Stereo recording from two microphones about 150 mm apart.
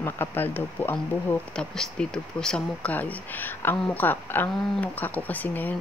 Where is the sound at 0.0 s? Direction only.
15° left (ahead or behind).